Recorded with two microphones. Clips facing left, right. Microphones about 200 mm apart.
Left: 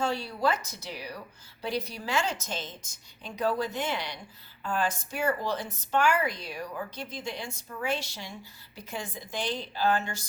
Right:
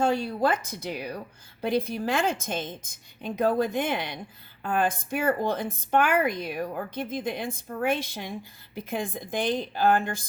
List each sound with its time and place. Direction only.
0.0 s speech: 50° right (ahead or behind)